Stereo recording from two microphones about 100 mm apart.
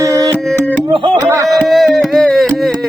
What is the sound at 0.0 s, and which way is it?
Music, 35° right (ahead or behind).